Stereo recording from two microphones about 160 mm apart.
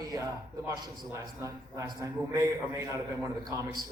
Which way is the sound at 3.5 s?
20° right (ahead or behind).